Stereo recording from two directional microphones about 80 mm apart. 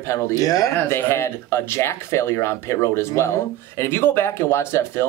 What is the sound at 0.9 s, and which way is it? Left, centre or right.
Speech, left.